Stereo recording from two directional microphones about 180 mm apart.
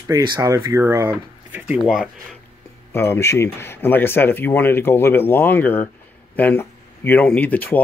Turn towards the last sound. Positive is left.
turn(degrees=10)  # may be behind; listen again after turning